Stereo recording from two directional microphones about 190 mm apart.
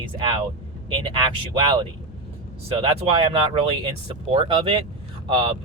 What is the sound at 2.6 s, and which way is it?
Speech, 30° right (ahead or behind).